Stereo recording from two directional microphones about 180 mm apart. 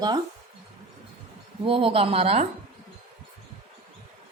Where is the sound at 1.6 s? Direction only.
30° right (ahead or behind).